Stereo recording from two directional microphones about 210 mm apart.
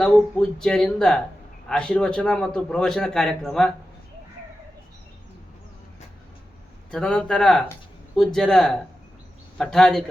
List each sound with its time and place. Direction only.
0.0 s a man's voice: 5° left (ahead or behind)
6.9 s a man's voice: 5° left (ahead or behind)